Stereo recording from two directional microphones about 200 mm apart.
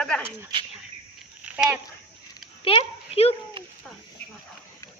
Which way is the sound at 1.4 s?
5° right (ahead or behind).